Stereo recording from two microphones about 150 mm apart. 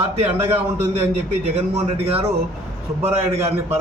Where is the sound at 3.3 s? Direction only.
15° right (ahead or behind).